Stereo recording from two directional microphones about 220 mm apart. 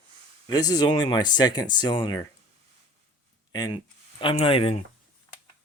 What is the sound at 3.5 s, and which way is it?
Speech, 15° left (ahead or behind).